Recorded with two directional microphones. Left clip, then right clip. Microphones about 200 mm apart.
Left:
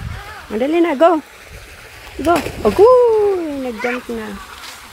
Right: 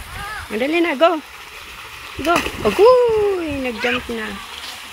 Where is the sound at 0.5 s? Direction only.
25° left (ahead or behind).